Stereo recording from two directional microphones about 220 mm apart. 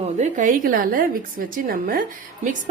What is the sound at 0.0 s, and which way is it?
A woman's voice, 35° right (ahead or behind).